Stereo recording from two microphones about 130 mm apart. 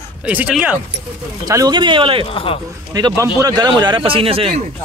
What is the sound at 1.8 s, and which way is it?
Speech, 40° right (ahead or behind).